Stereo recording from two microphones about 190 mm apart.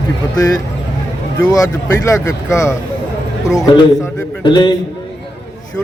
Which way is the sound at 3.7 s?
25° left (ahead or behind).